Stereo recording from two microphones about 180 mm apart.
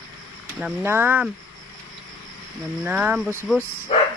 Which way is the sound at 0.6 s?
10° right (ahead or behind).